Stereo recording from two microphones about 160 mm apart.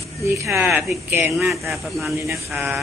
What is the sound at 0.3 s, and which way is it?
Speech, 15° right (ahead or behind).